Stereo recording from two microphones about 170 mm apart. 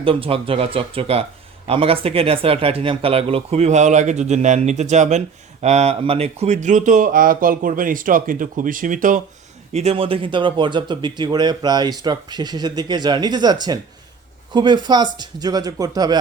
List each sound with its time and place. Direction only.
0.0 s speech: 35° right (ahead or behind); by 9.2 s 50° right (ahead or behind)
9.7 s speech: 35° right (ahead or behind)